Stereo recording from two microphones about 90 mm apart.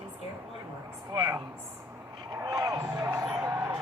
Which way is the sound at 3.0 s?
25° right (ahead or behind).